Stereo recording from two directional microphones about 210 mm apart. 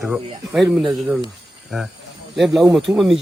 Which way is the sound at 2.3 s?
Centre (ahead or behind).